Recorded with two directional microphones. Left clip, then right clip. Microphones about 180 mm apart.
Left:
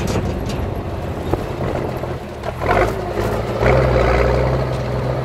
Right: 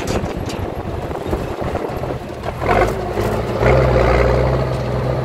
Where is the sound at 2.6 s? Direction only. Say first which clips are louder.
Right 1 dB; 30° left (ahead or behind).